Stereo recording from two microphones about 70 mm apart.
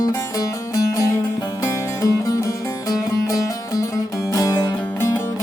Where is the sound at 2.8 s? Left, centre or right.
Left.